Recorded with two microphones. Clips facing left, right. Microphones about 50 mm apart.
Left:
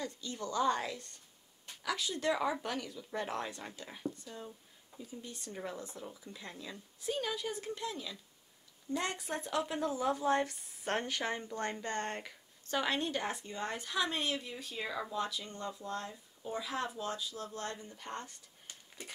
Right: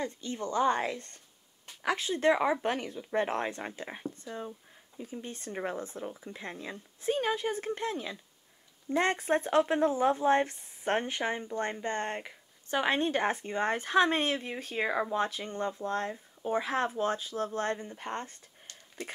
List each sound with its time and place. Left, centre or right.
0.0 s speech: right